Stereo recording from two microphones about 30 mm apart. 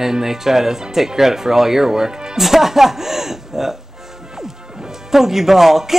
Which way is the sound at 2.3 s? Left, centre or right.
Centre.